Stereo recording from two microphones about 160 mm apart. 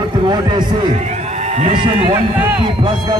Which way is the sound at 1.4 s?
45° right (ahead or behind).